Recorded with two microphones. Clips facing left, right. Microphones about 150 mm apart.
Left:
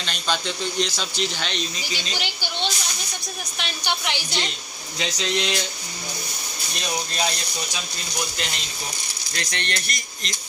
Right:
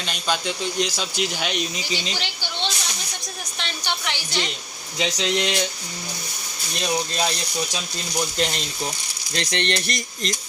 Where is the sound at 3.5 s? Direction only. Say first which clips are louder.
Left 1 dB; 10° left (ahead or behind).